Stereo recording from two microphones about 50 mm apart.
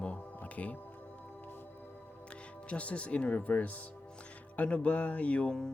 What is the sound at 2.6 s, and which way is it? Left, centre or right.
Speech, left.